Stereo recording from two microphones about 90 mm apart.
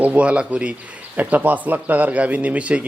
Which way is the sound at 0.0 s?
15° right (ahead or behind).